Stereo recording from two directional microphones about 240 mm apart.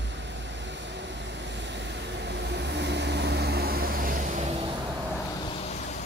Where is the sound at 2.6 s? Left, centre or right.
Right.